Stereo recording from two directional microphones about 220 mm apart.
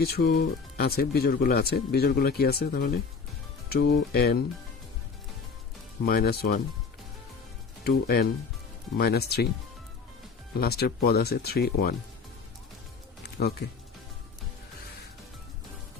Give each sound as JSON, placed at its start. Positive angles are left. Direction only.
{"t": 0.0, "sound": "speech", "side_deg": 45}
{"t": 6.1, "sound": "speech", "side_deg": 45}
{"t": 7.9, "sound": "speech", "side_deg": 45}
{"t": 10.5, "sound": "speech", "side_deg": 45}